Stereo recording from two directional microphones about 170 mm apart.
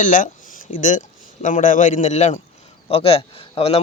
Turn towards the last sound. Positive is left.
turn(degrees=35)  # may be behind; listen again after turning